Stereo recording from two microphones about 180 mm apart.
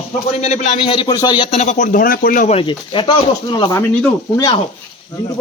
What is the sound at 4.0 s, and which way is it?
Speech, 5° left (ahead or behind).